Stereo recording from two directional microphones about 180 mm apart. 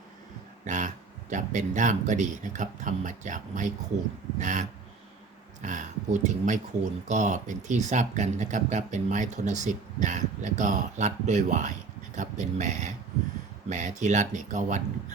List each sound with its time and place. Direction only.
0.6 s a sound: 45° right (ahead or behind)
1.3 s speech: 45° right (ahead or behind)
5.6 s speech: 45° right (ahead or behind)